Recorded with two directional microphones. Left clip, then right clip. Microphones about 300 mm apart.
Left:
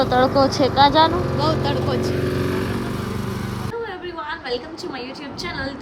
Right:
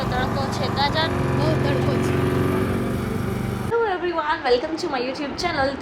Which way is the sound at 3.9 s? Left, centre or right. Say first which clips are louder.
Right 6 dB; centre.